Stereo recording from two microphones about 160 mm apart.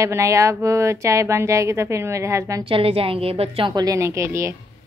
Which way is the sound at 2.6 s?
35° right (ahead or behind).